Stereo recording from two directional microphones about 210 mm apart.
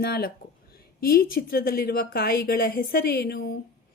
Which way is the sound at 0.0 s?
50° left (ahead or behind).